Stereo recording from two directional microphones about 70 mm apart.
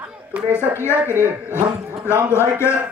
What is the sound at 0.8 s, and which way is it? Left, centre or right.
A man's voice, left.